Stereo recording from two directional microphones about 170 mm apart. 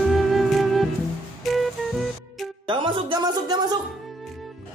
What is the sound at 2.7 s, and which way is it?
Speech, 30° right (ahead or behind).